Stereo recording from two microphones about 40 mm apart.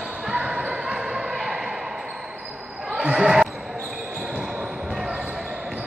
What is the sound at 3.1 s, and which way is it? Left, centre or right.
Basketball bounce, centre.